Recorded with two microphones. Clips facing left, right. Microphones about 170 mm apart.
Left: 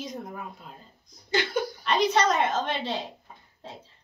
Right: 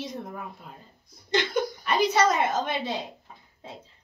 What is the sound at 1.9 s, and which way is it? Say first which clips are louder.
A woman's voice: even; 10° right (ahead or behind).